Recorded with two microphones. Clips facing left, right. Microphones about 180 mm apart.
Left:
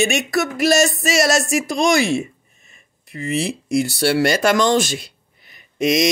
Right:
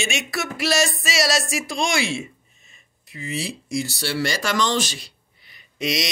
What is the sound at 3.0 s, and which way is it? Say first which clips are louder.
Speech: left 7 dB; 55° left (ahead or behind).